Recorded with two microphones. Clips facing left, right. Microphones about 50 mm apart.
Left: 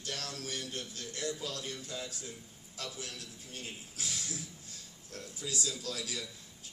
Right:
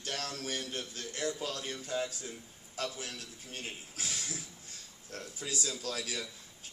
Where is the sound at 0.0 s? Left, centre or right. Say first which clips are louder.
Right 3 dB; right.